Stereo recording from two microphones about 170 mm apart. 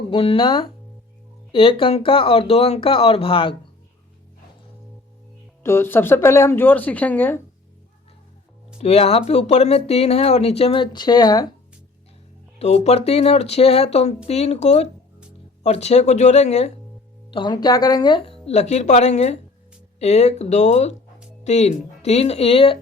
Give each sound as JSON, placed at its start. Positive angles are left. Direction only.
{"t": 0.1, "sound": "speech", "side_deg": 30}
{"t": 5.6, "sound": "speech", "side_deg": 15}
{"t": 8.8, "sound": "speech", "side_deg": 40}
{"t": 12.5, "sound": "speech", "side_deg": 40}
{"t": 17.3, "sound": "speech", "side_deg": 25}
{"t": 18.4, "sound": "speech", "side_deg": 40}